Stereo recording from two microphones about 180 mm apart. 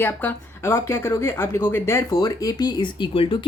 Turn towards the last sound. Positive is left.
turn(degrees=30)  # may be behind; listen again after turning